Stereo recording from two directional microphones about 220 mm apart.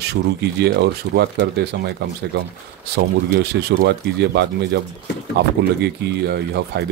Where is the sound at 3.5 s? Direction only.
50° right (ahead or behind).